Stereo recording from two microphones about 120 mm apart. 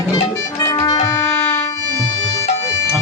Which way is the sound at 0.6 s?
30° left (ahead or behind).